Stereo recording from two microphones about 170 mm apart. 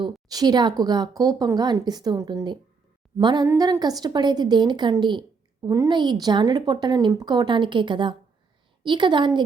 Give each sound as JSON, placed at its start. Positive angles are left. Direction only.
{"t": 0.0, "sound": "a woman's voice", "side_deg": -25}